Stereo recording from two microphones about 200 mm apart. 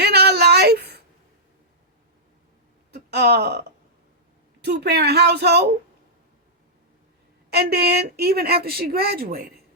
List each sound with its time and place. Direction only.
0.0 s a sound: 55° right (ahead or behind)
2.9 s speech: 55° right (ahead or behind)
7.5 s speech: 55° right (ahead or behind)